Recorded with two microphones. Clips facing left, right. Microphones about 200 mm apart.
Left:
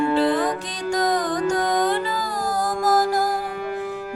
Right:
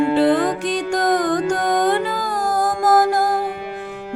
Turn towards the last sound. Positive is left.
turn(degrees=-55)  # may be behind; listen again after turning